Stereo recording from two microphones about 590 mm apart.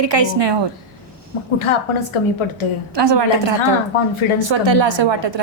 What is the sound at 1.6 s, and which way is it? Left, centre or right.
Speech, left.